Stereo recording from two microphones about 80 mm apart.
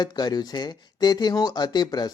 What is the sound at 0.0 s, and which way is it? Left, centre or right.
Speech, left.